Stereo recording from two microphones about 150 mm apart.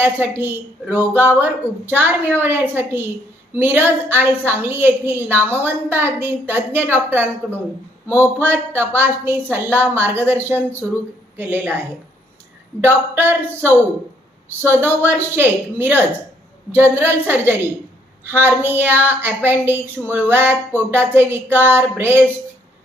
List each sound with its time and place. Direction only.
0.0 s a woman's voice: 15° right (ahead or behind)
12.8 s a woman's voice: 15° right (ahead or behind)